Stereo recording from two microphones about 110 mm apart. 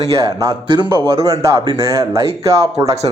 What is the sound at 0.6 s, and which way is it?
Speech, 45° right (ahead or behind).